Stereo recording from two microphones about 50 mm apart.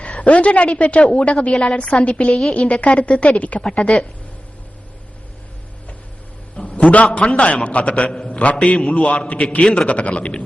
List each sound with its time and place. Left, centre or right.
0.2 s a woman's voice: left
6.6 s a sound: left
7.3 s a woman's voice: left